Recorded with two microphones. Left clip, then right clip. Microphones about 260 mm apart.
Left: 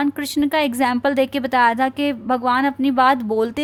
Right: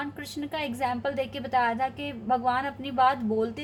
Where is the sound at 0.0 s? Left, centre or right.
Left.